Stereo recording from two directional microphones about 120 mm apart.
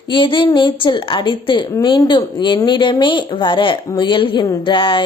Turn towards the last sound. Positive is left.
turn(degrees=45)  # may be behind; listen again after turning